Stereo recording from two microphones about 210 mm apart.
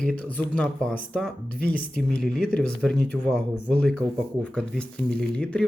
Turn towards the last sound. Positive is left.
turn(degrees=5)  # may be behind; listen again after turning